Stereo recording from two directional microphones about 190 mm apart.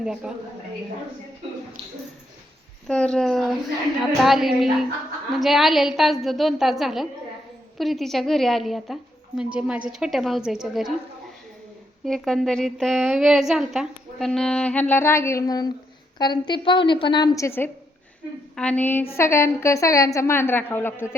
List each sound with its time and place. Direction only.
0.0 s a woman's voice: 5° right (ahead or behind)
2.8 s a woman's voice: 5° left (ahead or behind)
12.0 s a woman's voice: centre (ahead or behind)